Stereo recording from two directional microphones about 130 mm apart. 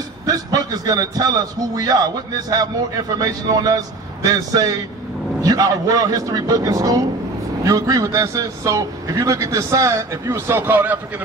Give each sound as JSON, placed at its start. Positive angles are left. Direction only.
{"t": 0.3, "sound": "a man's voice", "side_deg": -30}